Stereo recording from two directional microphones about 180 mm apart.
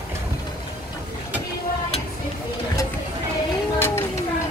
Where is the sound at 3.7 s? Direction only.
15° left (ahead or behind).